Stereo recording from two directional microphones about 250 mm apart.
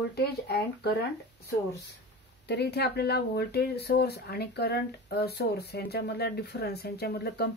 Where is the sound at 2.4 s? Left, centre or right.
Left.